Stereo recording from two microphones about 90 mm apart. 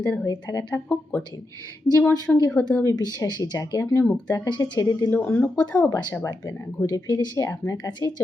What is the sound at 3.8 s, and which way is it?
Speech, 30° left (ahead or behind).